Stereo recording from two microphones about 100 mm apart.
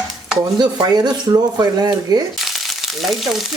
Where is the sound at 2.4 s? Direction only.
Centre (ahead or behind).